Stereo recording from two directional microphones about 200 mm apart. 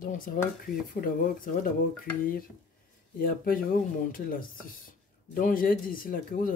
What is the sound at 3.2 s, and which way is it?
Speech, 45° left (ahead or behind).